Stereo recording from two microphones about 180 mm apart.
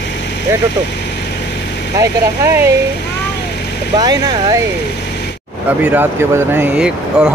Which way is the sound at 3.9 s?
25° right (ahead or behind).